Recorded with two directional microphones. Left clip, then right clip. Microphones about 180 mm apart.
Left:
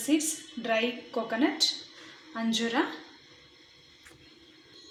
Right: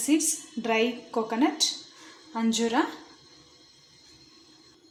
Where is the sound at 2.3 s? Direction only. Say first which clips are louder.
Right 3 dB; 60° right (ahead or behind).